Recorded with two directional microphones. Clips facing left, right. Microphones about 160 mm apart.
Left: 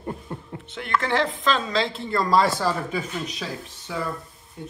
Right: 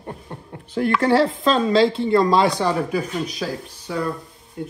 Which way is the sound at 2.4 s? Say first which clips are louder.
Right 4 dB; centre (ahead or behind).